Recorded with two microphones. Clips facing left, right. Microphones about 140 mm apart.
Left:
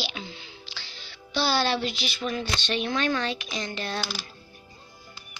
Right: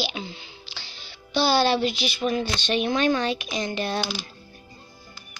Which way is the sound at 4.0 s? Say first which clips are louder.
Right 4 dB; centre (ahead or behind).